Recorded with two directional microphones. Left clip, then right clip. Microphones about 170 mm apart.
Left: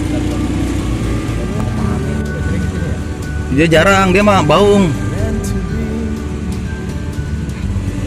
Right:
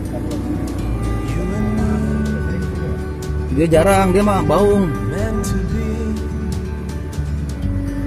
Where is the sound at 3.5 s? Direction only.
20° right (ahead or behind).